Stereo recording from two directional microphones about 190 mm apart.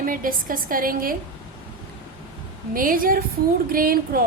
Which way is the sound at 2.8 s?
50° right (ahead or behind).